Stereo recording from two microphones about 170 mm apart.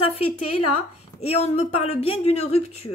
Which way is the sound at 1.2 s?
35° left (ahead or behind).